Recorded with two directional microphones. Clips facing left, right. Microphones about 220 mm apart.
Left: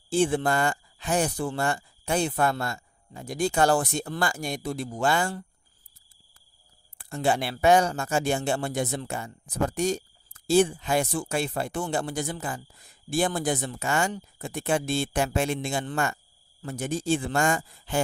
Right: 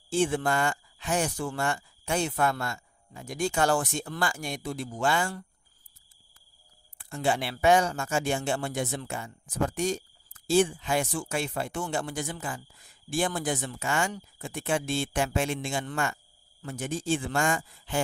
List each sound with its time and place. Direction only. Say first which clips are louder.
0.1 s speech: left 3 dB; 35° left (ahead or behind)
7.0 s speech: left 2 dB; 40° left (ahead or behind)